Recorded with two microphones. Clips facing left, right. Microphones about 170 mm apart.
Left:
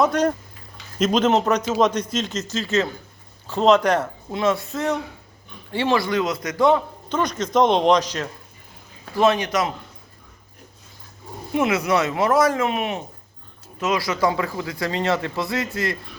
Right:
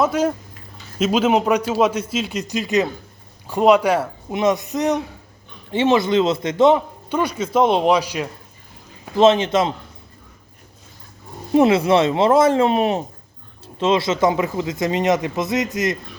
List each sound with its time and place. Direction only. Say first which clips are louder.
0.0 s a man's voice: right 1 dB; 5° right (ahead or behind)
9.1 s speech: right 5 dB; 25° right (ahead or behind)
11.5 s speech: right 6 dB; 30° right (ahead or behind)